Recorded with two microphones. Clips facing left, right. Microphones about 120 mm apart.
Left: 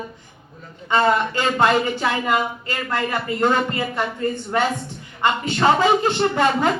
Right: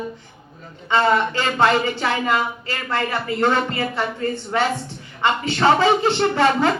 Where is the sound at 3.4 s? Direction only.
10° left (ahead or behind).